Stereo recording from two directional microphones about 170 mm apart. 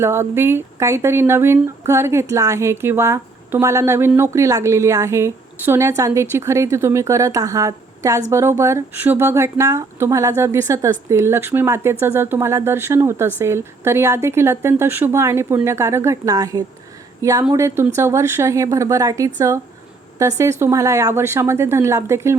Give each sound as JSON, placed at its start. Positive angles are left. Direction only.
{"t": 0.0, "sound": "speech", "side_deg": -15}